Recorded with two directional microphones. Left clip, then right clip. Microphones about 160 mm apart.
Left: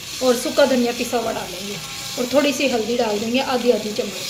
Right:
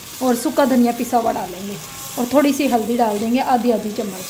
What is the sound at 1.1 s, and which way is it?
Speech, 90° right.